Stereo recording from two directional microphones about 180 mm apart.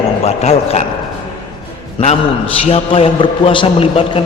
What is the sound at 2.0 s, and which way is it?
A man's voice, 35° left (ahead or behind).